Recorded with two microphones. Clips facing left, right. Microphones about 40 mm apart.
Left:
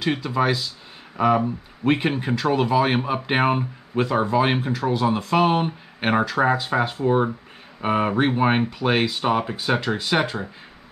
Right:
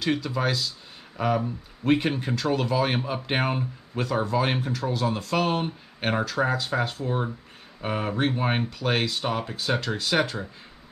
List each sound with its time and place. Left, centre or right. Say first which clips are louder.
0.0 s speech: left 4 dB; centre